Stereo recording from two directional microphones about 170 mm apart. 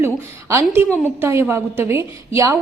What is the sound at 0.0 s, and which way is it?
A woman's voice, 15° right (ahead or behind).